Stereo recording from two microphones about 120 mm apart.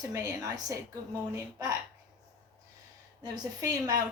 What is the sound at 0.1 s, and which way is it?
Speech, 30° right (ahead or behind).